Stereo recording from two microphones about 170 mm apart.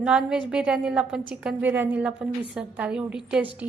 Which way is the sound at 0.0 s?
5° right (ahead or behind).